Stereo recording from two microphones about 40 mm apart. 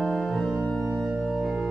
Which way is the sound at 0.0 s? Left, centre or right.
Centre.